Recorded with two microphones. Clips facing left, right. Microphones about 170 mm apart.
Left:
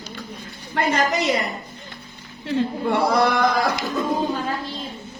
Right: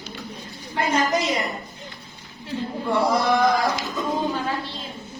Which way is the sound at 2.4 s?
75° left (ahead or behind).